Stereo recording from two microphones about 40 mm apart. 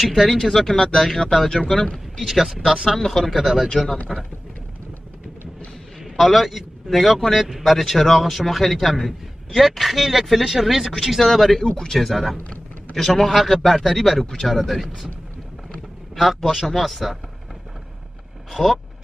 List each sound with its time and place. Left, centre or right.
0.0 s a man's voice: centre
0.7 s a man's voice: centre
3.1 s a man's voice: centre
3.8 s speech: centre
6.0 s a man's voice: centre
11.1 s a man's voice: centre
16.2 s a man's voice: centre
18.5 s a man's voice: centre